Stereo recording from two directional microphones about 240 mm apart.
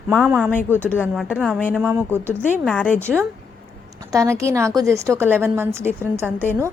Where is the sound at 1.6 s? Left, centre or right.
Centre.